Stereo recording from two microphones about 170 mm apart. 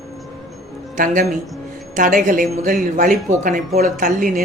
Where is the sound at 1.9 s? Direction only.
50° right (ahead or behind).